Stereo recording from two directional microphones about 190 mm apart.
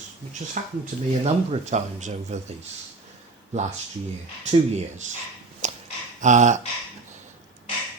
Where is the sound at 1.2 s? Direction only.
35° right (ahead or behind).